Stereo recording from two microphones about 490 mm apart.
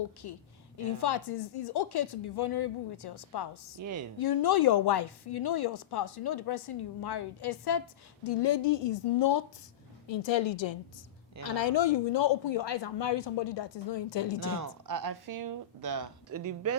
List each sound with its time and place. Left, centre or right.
0.2 s a woman's voice: left
3.8 s speech: right
4.2 s a woman's voice: left
14.4 s speech: right